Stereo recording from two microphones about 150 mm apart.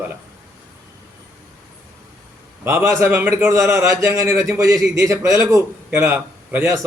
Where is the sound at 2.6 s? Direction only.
15° right (ahead or behind).